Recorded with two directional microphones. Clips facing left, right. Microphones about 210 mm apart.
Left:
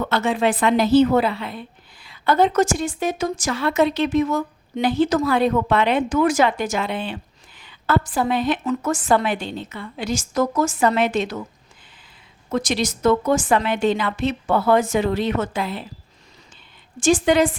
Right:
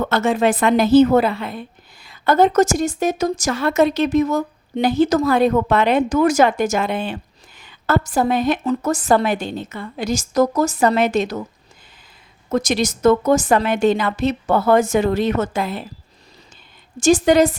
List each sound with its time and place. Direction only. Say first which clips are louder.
0.0 s a woman's voice: right 3 dB; 45° right (ahead or behind)
12.5 s a woman's voice: right 3 dB; 45° right (ahead or behind)
17.0 s a woman's voice: right 3 dB; 40° right (ahead or behind)